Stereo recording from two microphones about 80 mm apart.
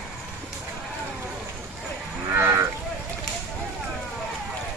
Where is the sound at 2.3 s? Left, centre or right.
Right.